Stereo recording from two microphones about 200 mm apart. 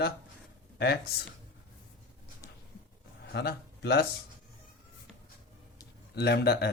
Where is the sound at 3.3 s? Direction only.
55° left (ahead or behind).